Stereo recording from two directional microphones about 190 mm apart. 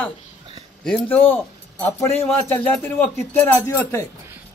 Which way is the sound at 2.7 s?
10° left (ahead or behind).